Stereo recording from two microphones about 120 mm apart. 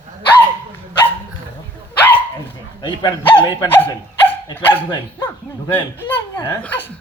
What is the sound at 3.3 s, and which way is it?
Speech, 15° left (ahead or behind).